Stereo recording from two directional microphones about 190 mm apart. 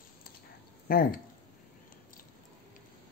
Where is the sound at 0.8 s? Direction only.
50° left (ahead or behind).